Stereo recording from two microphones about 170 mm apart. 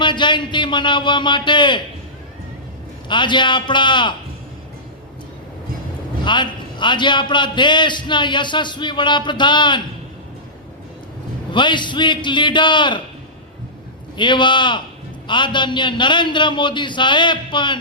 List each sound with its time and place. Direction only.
0.0 s a man's voice: 25° left (ahead or behind)
3.1 s a man's voice: 25° left (ahead or behind)
6.2 s a man's voice: 25° left (ahead or behind)
11.5 s a man's voice: 25° left (ahead or behind)
14.2 s a man's voice: 25° left (ahead or behind)